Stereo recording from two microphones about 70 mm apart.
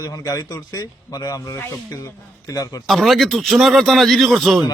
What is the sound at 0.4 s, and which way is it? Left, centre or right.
Speech, left.